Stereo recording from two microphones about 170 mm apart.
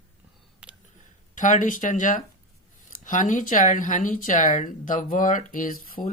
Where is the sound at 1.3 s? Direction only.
50° left (ahead or behind).